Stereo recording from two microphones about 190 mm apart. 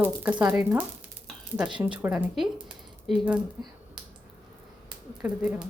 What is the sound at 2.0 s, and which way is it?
Speech, 10° right (ahead or behind).